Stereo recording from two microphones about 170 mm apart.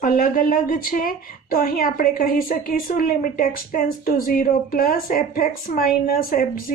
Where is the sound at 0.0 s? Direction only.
55° left (ahead or behind).